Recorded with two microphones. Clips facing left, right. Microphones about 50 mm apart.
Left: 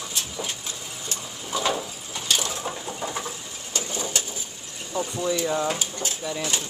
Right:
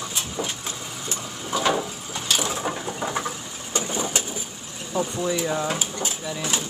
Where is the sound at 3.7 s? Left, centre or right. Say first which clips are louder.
Right 3 dB; right.